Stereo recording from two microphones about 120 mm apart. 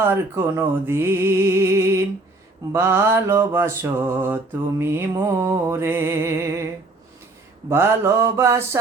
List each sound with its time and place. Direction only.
0.0 s music: 20° right (ahead or behind)
7.7 s music: 20° right (ahead or behind)